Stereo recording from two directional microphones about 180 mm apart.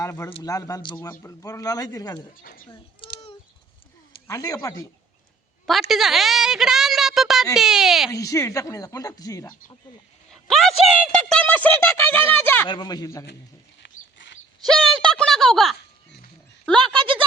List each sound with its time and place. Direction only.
0.0 s a woman's voice: 15° left (ahead or behind)
2.4 s speech: 50° left (ahead or behind)
2.6 s a sound: 25° left (ahead or behind)
4.3 s a woman's voice: 20° left (ahead or behind)
5.9 s speech: centre (ahead or behind)
8.1 s a woman's voice: 15° left (ahead or behind)
10.2 s a sound: centre (ahead or behind)
12.6 s a woman's voice: 25° left (ahead or behind)
13.8 s rodents: 90° left
14.6 s a sound: 5° left (ahead or behind)